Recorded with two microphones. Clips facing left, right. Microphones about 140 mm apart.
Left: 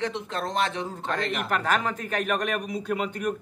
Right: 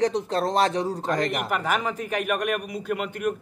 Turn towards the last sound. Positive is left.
turn(degrees=-5)  # may be behind; listen again after turning